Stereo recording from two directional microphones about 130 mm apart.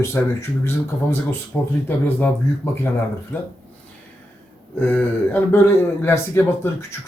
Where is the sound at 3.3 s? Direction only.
15° left (ahead or behind).